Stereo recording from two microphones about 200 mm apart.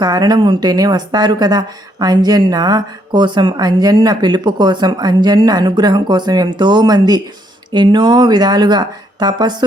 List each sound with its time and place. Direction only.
0.0 s speech: 20° right (ahead or behind)